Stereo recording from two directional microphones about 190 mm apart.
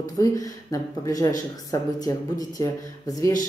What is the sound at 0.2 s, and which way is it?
Speech, 20° left (ahead or behind).